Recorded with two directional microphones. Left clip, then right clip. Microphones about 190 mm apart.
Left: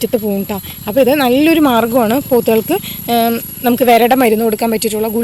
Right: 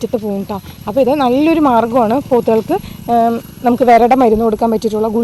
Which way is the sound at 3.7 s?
10° right (ahead or behind).